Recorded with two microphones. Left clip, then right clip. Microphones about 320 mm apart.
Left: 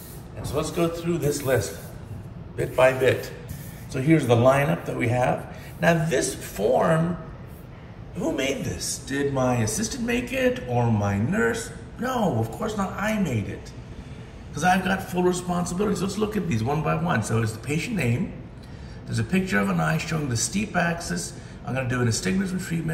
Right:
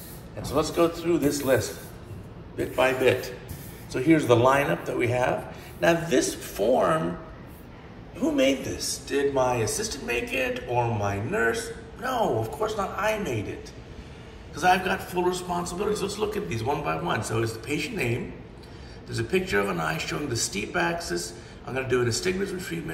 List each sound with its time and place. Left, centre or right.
0.5 s a man's voice: centre
8.2 s a man's voice: centre
14.5 s a man's voice: centre